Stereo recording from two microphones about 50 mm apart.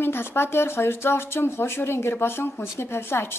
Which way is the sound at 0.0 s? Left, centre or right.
Left.